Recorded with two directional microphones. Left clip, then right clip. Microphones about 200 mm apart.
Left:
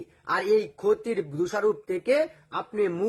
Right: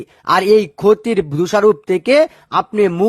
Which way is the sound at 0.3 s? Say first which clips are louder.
Right 11 dB; 40° right (ahead or behind).